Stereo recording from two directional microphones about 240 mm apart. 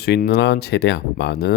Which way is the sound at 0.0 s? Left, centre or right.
Left.